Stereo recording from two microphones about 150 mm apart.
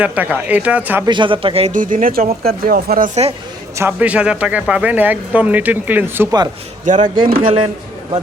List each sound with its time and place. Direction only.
0.0 s speech: 10° right (ahead or behind)
1.0 s speech: 30° right (ahead or behind)
1.7 s speech: 65° right (ahead or behind)
2.4 s speech: 85° right
3.8 s speech: 10° right (ahead or behind)
6.8 s speech: 60° right (ahead or behind); by 7.5 s 75° right (ahead or behind)